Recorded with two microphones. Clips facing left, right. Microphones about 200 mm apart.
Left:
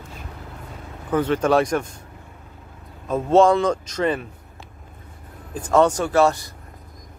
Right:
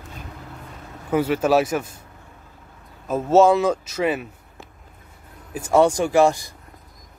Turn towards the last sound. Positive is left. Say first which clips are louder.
# right 1 dB
turn(degrees=-10)  # may be behind; listen again after turning